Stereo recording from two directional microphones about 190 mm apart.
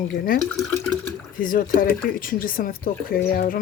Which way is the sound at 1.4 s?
45° left (ahead or behind).